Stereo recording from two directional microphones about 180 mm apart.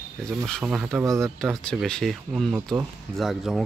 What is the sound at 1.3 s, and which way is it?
Speech, 5° left (ahead or behind).